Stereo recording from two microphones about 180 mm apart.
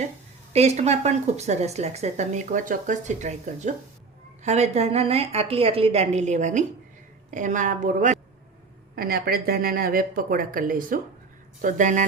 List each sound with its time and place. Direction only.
0.5 s a woman's voice: 35° right (ahead or behind)
9.0 s speech: 55° right (ahead or behind)